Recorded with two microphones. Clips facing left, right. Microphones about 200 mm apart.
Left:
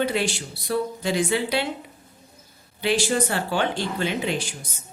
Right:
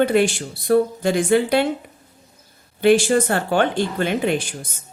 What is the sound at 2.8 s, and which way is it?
Speech, 50° right (ahead or behind).